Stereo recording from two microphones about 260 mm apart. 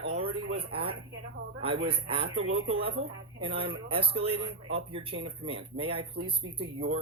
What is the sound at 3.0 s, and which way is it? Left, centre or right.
Speech, right.